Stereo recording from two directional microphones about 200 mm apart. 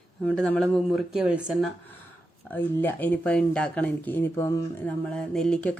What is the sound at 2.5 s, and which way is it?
Speech, 10° left (ahead or behind).